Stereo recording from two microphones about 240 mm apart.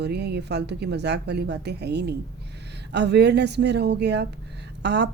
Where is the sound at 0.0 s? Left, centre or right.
Right.